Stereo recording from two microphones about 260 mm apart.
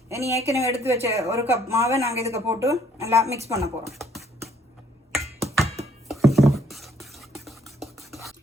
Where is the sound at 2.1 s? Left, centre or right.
Right.